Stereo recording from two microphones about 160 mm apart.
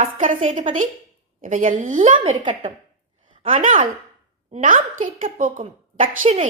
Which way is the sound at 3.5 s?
50° right (ahead or behind).